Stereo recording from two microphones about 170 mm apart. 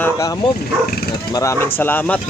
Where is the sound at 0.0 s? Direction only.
20° left (ahead or behind).